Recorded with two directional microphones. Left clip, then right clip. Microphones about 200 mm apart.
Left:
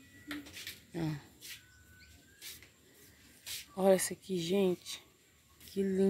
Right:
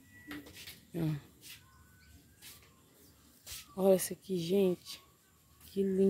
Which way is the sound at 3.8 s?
15° right (ahead or behind).